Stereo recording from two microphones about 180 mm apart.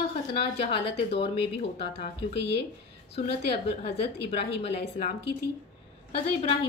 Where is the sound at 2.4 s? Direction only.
65° left (ahead or behind).